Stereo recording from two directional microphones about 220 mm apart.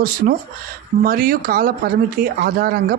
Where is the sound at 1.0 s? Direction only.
40° right (ahead or behind).